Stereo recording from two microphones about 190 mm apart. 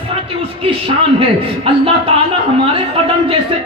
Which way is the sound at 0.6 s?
30° right (ahead or behind).